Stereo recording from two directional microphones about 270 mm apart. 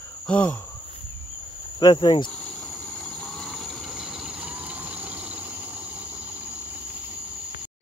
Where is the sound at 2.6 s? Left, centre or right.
Centre.